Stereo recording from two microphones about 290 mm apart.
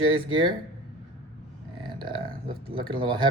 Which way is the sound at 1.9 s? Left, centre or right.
Centre.